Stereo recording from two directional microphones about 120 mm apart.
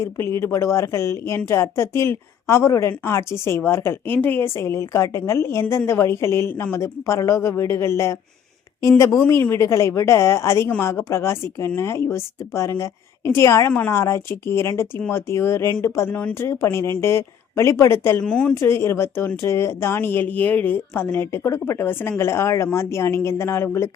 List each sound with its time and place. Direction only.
0.0 s speech: 20° left (ahead or behind)
9.2 s speech: 20° left (ahead or behind)
18.2 s speech: 5° left (ahead or behind)
18.5 s speech: 20° left (ahead or behind)